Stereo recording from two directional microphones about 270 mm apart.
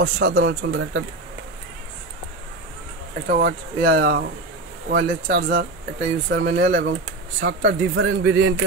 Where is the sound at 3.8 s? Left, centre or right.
Right.